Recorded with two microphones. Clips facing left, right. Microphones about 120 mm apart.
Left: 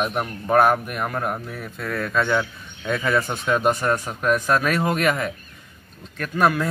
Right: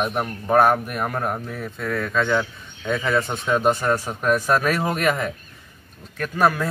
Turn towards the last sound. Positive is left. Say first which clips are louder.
# even
turn(degrees=-5)  # may be behind; listen again after turning